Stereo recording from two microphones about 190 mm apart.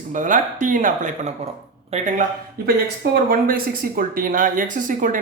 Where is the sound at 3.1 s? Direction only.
50° right (ahead or behind).